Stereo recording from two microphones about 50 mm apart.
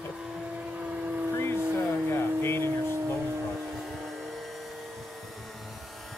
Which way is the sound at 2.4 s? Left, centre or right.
Left.